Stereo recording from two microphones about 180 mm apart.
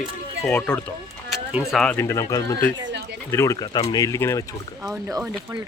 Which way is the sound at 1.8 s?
10° left (ahead or behind).